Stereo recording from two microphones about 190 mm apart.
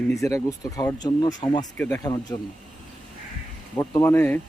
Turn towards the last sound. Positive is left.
turn(degrees=10)  # may be behind; listen again after turning